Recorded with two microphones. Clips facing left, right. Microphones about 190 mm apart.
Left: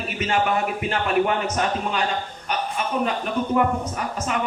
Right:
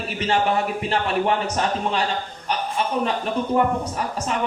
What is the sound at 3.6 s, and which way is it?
Speech, 35° right (ahead or behind).